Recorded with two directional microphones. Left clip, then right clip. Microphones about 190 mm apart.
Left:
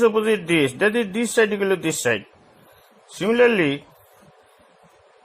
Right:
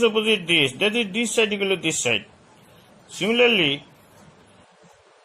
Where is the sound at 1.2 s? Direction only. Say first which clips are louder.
Left 4 dB; 25° left (ahead or behind).